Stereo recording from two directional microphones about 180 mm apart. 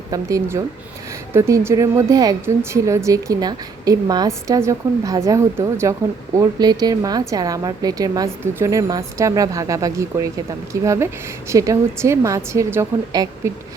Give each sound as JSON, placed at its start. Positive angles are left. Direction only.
{"t": 0.1, "sound": "a woman's voice", "side_deg": -20}